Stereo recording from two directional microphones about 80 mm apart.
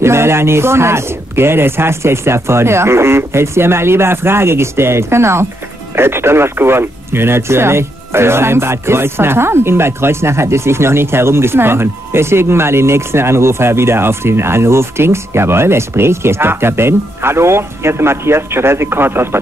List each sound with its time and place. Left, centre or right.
0.0 s speech: right